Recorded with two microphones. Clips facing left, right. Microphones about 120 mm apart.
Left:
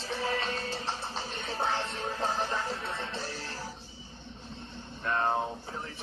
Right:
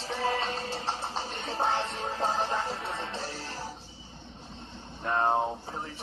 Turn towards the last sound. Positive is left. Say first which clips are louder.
# right 3 dB
turn(degrees=-25)  # may be behind; listen again after turning